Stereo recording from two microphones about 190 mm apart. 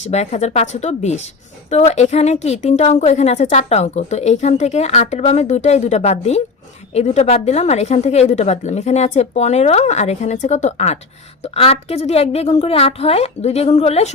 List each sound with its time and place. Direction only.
0.1 s a woman's voice: 35° left (ahead or behind)